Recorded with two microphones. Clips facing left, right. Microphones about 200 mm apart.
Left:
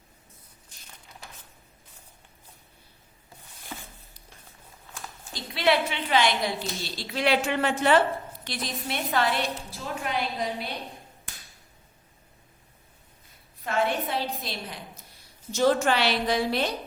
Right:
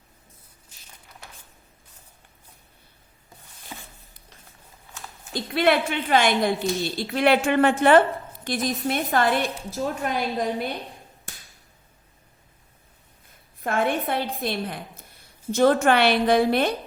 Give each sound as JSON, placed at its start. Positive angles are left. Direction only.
{"t": 5.3, "sound": "a woman's voice", "side_deg": -50}
{"t": 13.6, "sound": "a woman's voice", "side_deg": -50}